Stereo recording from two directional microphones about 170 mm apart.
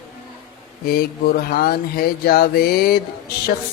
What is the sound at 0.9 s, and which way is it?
Speech, 65° left (ahead or behind).